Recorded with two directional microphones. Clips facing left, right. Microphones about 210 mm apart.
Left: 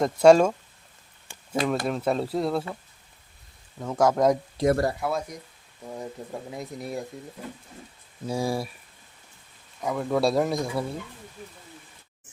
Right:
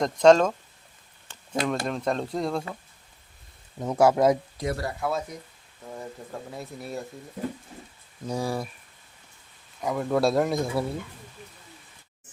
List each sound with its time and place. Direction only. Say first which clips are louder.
0.0 s speech: left 1 dB; 10° left (ahead or behind)
1.3 s a sound: left 2 dB; 5° left (ahead or behind)
1.9 s speech: left 2 dB; 5° left (ahead or behind)
3.8 s speech: right 2 dB; 10° right (ahead or behind)
4.6 s speech: left 11 dB; 50° left (ahead or behind)
4.9 s speech: even; 5° left (ahead or behind)
8.3 s speech: left 2 dB; 10° left (ahead or behind)
9.8 s speech: even; centre (ahead or behind)